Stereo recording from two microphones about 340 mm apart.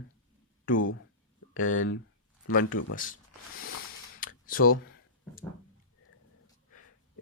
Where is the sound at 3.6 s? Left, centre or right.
Left.